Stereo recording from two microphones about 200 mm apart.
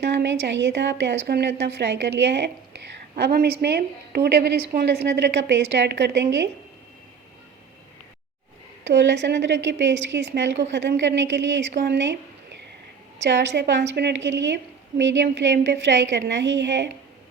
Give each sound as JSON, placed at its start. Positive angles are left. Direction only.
{"t": 0.0, "sound": "a woman's voice", "side_deg": -60}
{"t": 8.8, "sound": "a woman's voice", "side_deg": -65}
{"t": 13.2, "sound": "a woman's voice", "side_deg": -60}